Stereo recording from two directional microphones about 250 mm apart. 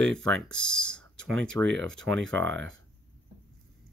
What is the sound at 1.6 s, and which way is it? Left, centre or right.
Speech, right.